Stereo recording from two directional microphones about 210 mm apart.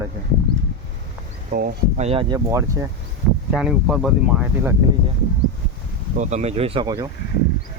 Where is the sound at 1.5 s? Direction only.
45° right (ahead or behind).